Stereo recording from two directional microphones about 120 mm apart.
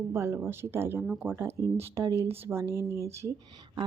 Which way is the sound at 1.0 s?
5° right (ahead or behind).